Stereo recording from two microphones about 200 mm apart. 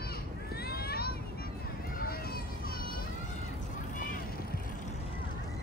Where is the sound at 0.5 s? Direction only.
50° left (ahead or behind).